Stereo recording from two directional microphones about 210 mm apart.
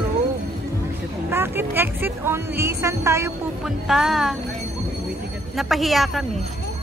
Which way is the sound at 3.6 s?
Centre (ahead or behind).